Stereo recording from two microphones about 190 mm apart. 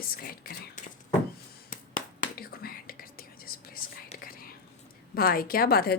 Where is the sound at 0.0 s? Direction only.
50° left (ahead or behind).